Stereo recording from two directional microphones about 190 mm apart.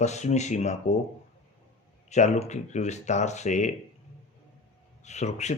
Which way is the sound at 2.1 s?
35° left (ahead or behind).